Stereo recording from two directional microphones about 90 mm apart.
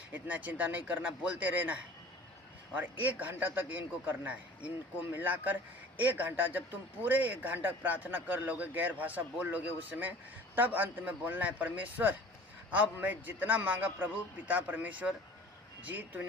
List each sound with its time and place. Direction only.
0.1 s a man's voice: 15° right (ahead or behind)